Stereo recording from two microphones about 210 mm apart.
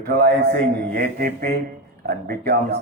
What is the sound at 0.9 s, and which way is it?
Mantra, 40° right (ahead or behind).